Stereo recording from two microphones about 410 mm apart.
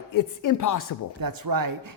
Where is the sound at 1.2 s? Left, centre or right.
Right.